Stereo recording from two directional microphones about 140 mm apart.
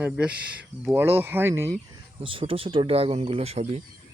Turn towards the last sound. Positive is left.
turn(degrees=-45)  # may be behind; listen again after turning